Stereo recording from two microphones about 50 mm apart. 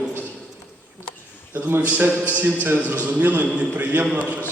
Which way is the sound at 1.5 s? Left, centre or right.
Right.